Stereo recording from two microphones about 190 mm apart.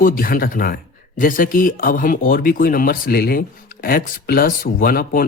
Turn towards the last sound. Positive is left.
turn(degrees=50)  # may be behind; listen again after turning